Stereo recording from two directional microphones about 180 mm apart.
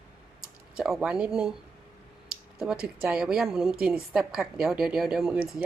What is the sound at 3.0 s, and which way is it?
A woman's voice, 5° right (ahead or behind).